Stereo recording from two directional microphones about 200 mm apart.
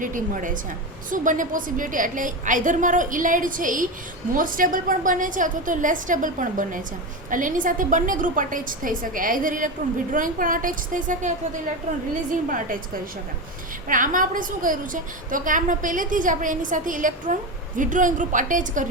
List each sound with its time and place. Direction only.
0.0 s a woman's voice: 40° right (ahead or behind)